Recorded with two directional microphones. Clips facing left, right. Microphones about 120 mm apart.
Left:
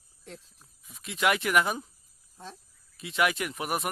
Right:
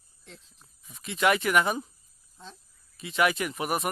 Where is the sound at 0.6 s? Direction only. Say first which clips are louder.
Right 1 dB; centre (ahead or behind).